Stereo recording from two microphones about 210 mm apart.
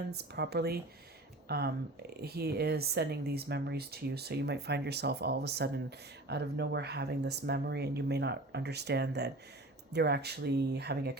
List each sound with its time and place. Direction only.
0.1 s speech: 50° right (ahead or behind)